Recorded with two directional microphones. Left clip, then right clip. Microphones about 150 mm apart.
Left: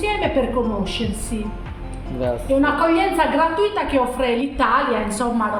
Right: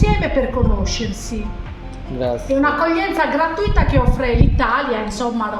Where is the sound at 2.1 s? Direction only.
45° right (ahead or behind).